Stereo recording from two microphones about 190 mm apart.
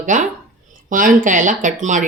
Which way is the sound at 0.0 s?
40° right (ahead or behind).